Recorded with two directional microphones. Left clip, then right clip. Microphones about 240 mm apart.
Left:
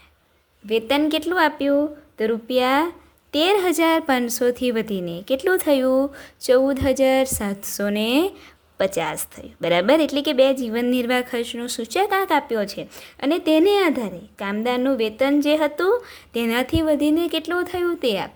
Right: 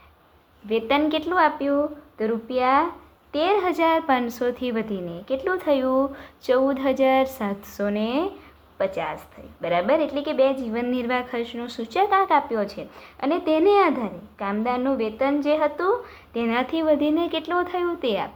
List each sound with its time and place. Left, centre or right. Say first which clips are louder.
0.7 s a woman's voice: left 2 dB; left